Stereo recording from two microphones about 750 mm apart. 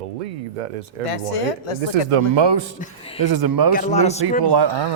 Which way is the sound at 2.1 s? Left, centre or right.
Right.